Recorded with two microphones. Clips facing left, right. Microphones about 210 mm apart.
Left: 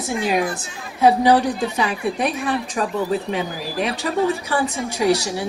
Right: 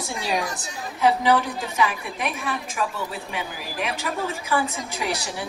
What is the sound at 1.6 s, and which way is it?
A woman's voice, 30° left (ahead or behind).